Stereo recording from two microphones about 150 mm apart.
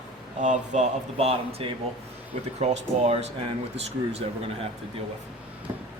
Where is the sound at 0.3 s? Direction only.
55° right (ahead or behind).